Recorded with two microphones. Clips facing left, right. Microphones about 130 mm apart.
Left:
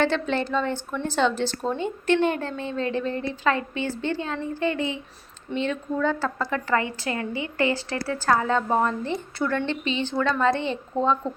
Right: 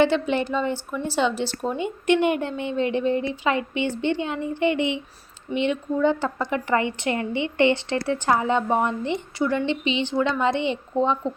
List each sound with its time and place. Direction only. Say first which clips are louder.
0.0 s a woman's voice: right 3 dB; 15° right (ahead or behind)